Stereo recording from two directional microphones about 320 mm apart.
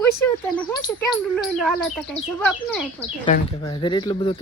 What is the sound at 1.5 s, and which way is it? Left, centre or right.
Speech, centre.